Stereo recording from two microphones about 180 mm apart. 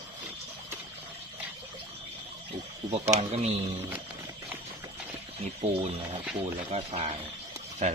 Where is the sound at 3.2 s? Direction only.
35° right (ahead or behind).